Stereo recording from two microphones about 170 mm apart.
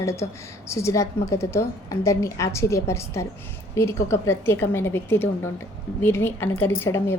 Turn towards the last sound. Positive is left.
turn(degrees=15)  # may be behind; listen again after turning